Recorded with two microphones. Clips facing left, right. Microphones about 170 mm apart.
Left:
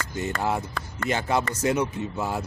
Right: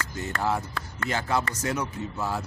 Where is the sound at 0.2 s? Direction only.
20° left (ahead or behind).